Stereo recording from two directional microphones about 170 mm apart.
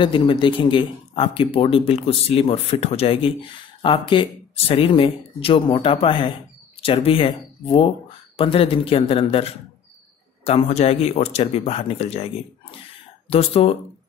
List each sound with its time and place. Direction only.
0.0 s speech: 30° left (ahead or behind)
13.3 s speech: 35° left (ahead or behind)